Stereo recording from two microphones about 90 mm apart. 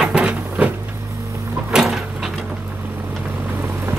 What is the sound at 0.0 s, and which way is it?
Printer, 10° right (ahead or behind).